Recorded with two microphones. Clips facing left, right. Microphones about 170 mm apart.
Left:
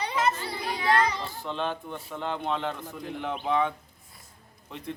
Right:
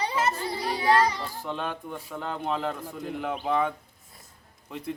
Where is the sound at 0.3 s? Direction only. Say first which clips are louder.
Right 1 dB; 35° right (ahead or behind).